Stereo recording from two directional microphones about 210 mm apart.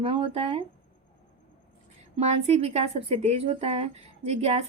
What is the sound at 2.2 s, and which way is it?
Speech, 30° right (ahead or behind).